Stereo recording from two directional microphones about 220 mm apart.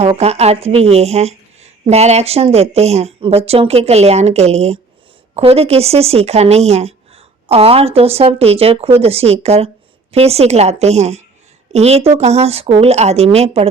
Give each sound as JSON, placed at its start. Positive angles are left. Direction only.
{"t": 0.0, "sound": "speech", "side_deg": -30}